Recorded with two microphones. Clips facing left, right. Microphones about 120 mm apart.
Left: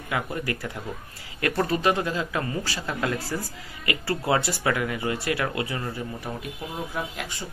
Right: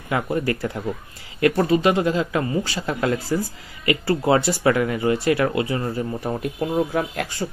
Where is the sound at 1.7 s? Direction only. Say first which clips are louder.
Right 6 dB; 20° right (ahead or behind).